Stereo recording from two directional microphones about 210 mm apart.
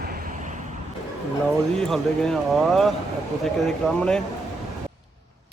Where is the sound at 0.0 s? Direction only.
45° right (ahead or behind).